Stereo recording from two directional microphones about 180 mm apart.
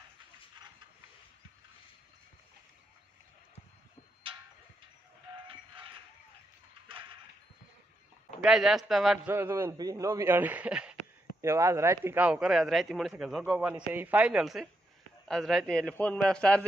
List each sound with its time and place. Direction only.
5.5 s a sound: 30° right (ahead or behind)
8.4 s speech: centre (ahead or behind)
9.3 s a man's voice: 15° right (ahead or behind)
11.4 s speech: 15° right (ahead or behind); by 16.6 s 5° left (ahead or behind)